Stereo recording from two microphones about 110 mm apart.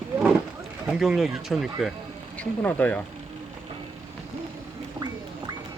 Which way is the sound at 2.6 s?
15° left (ahead or behind).